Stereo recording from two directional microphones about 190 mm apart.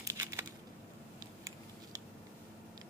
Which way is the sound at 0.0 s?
15° right (ahead or behind).